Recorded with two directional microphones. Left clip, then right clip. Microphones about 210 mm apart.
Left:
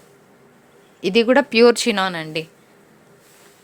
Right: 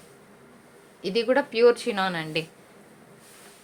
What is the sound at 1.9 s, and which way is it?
Speech, 30° left (ahead or behind).